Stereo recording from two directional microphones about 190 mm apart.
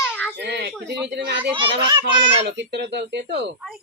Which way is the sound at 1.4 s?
25° right (ahead or behind).